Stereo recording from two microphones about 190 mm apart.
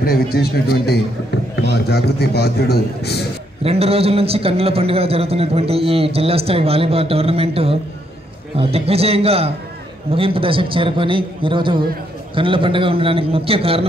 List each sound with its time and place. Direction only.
0.0 s a man's voice: 55° left (ahead or behind)
3.6 s a man's voice: 30° right (ahead or behind)